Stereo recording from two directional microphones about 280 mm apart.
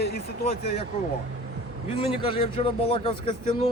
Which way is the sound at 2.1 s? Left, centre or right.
Centre.